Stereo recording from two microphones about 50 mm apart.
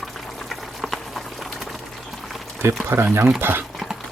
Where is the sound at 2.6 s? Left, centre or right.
Right.